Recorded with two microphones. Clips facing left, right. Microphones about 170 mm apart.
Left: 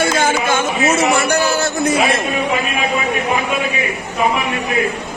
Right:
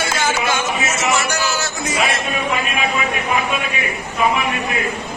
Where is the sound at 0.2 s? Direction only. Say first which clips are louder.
Left 3 dB; 55° left (ahead or behind).